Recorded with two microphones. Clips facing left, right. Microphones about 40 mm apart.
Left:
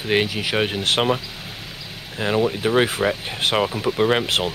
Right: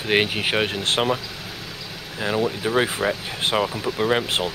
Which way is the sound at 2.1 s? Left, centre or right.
Centre.